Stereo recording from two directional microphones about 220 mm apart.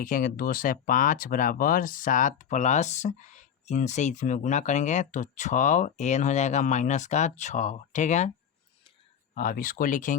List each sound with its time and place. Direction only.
0.0 s speech: 40° left (ahead or behind)
9.3 s speech: 35° left (ahead or behind)